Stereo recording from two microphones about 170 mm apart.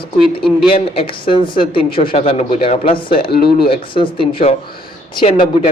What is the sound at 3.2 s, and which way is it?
Speech, 65° left (ahead or behind).